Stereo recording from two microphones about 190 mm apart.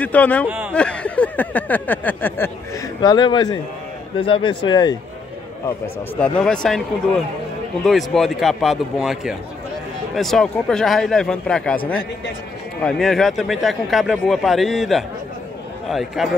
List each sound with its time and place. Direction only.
0.0 s a sound: 5° left (ahead or behind)
0.5 s speech: 10° right (ahead or behind)
0.7 s a sound: 5° left (ahead or behind)
3.0 s speech: 20° left (ahead or behind)
6.1 s speech: 5° left (ahead or behind)
7.8 s speech: centre (ahead or behind)
12.8 s speech: 5° left (ahead or behind)